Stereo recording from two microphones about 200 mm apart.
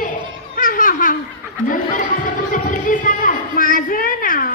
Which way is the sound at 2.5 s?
40° left (ahead or behind).